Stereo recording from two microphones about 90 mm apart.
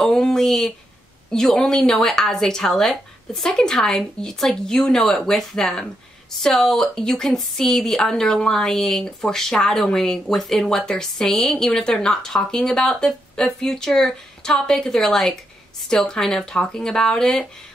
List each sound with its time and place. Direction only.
0.0 s speech: 5° left (ahead or behind)